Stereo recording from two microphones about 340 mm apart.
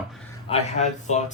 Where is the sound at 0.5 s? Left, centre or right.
Centre.